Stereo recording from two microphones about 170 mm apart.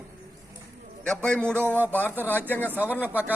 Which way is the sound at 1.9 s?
10° left (ahead or behind).